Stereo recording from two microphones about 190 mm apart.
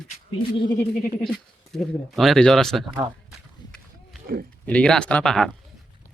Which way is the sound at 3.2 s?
Centre (ahead or behind).